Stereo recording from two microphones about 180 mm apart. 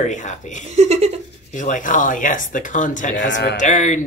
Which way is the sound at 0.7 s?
35° right (ahead or behind).